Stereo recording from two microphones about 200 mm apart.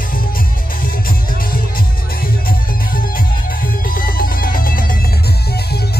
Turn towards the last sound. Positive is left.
turn(degrees=45)  # may be behind; listen again after turning